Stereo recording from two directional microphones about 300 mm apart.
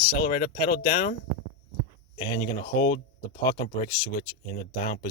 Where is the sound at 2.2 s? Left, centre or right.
Centre.